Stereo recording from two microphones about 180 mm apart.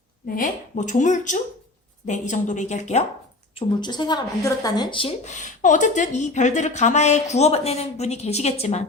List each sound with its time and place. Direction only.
0.3 s speech: 45° left (ahead or behind)
3.5 s speech: 25° left (ahead or behind)